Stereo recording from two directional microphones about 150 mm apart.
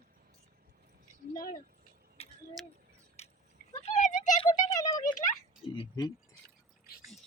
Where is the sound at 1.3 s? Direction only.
65° left (ahead or behind).